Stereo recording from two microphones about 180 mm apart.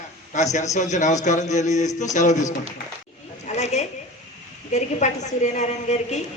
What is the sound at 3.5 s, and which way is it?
A woman's voice, 40° left (ahead or behind).